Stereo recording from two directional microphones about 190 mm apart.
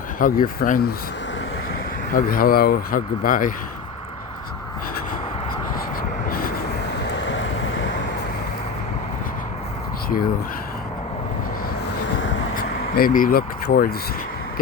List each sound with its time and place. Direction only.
0.2 s speech: 50° left (ahead or behind)
2.1 s speech: 50° left (ahead or behind)
6.0 s vehicle: 50° left (ahead or behind)
7.3 s vehicle: 80° left
11.9 s vehicle: 70° left (ahead or behind)
12.5 s speech: 50° left (ahead or behind)